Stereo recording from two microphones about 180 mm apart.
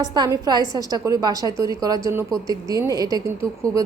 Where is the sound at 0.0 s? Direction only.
20° right (ahead or behind).